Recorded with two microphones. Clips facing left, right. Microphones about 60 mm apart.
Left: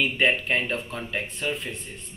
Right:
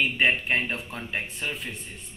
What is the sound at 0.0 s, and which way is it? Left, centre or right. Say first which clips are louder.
A man's voice: left 1 dB; centre.